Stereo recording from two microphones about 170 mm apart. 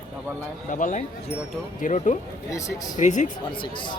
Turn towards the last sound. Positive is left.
turn(degrees=30)  # may be behind; listen again after turning